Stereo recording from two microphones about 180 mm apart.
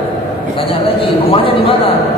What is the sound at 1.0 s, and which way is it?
Speech, 30° left (ahead or behind).